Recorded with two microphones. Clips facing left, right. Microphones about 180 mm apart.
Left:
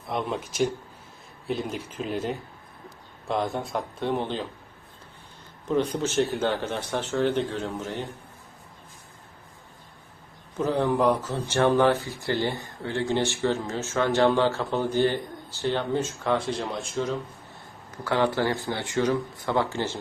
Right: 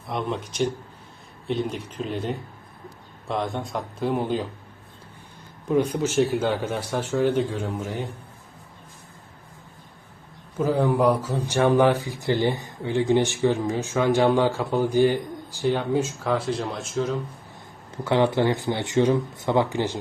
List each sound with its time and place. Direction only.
0.1 s speech: centre (ahead or behind)
5.6 s speech: 10° right (ahead or behind)
10.6 s speech: 5° right (ahead or behind)
17.9 s speech: 25° right (ahead or behind)